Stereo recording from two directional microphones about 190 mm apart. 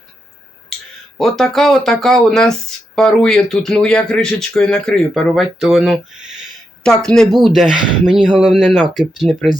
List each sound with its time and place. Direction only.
1.2 s speech: centre (ahead or behind)